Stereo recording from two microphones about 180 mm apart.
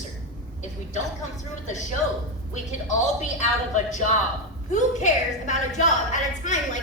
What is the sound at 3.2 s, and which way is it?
A woman's voice, 40° left (ahead or behind).